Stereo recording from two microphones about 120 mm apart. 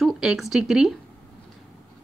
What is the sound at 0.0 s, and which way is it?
Speech, 5° right (ahead or behind).